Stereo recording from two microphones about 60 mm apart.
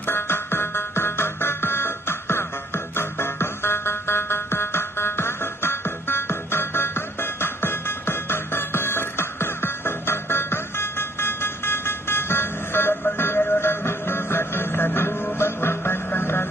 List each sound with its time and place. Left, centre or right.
0.0 s music: left